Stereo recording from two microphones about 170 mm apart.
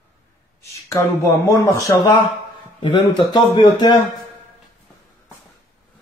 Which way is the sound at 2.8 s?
25° left (ahead or behind).